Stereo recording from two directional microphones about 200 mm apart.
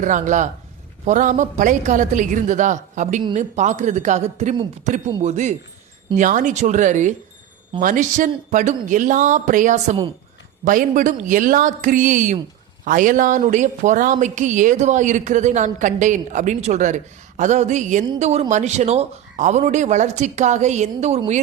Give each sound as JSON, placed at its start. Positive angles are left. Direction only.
{"t": 0.0, "sound": "a woman's voice", "side_deg": -40}